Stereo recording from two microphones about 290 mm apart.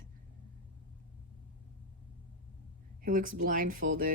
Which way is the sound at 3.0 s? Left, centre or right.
Right.